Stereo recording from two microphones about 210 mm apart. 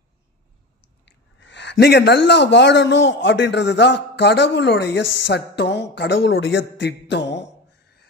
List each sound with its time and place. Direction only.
1.0 s speech: 55° left (ahead or behind)